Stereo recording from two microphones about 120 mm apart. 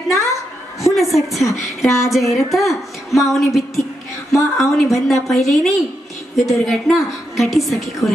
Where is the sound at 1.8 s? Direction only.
25° left (ahead or behind).